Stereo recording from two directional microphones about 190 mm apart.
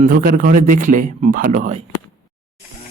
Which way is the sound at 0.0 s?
50° right (ahead or behind).